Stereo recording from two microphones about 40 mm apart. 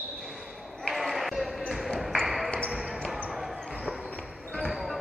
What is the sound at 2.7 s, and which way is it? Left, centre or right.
Basketball bounce, centre.